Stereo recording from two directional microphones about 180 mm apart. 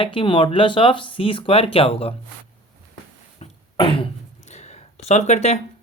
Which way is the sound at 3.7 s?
30° left (ahead or behind).